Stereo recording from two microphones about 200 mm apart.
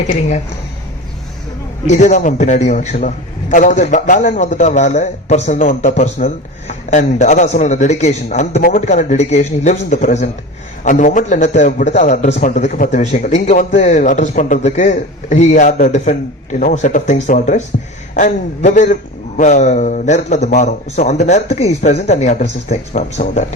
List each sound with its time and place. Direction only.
0.1 s a man's voice: 35° left (ahead or behind)
1.9 s a man's voice: 35° left (ahead or behind)